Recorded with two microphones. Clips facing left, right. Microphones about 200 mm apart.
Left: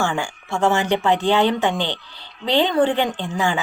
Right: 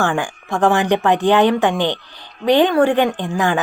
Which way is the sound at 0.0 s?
15° right (ahead or behind).